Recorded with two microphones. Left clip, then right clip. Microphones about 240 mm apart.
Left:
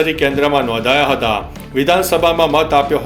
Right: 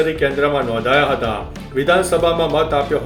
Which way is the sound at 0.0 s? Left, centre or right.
Centre.